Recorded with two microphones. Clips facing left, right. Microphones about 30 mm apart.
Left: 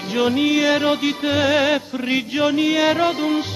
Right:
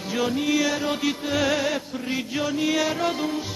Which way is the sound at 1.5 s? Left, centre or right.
Left.